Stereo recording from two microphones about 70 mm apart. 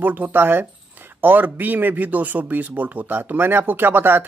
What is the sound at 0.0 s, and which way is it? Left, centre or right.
Speech, right.